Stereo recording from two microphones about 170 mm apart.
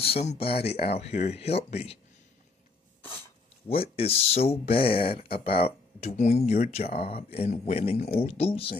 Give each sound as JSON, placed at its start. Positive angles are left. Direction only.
{"t": 0.0, "sound": "speech", "side_deg": 35}
{"t": 3.6, "sound": "speech", "side_deg": 35}